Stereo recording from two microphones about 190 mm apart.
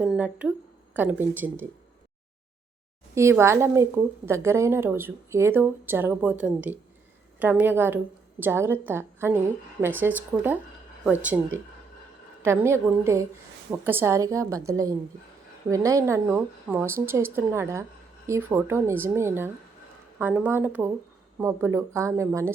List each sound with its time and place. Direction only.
0.0 s a woman's voice: 5° right (ahead or behind)
3.2 s a woman's voice: 15° right (ahead or behind)